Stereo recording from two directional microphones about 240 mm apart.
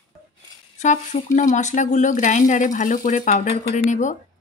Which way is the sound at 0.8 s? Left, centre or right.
Left.